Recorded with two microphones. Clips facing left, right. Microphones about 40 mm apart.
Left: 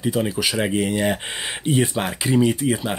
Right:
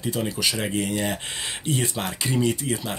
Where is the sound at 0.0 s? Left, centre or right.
Centre.